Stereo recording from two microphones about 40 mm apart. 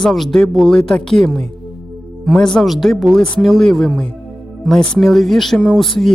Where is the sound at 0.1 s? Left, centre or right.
Centre.